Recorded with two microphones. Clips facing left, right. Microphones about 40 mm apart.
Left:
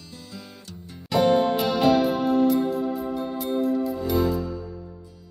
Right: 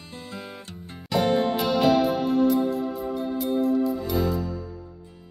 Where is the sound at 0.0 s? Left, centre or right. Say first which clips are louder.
Right 4 dB; right.